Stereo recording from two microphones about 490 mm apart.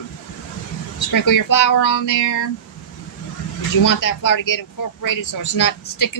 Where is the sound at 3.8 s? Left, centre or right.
Left.